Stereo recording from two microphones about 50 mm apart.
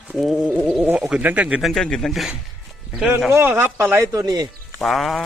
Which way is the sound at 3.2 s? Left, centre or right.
Right.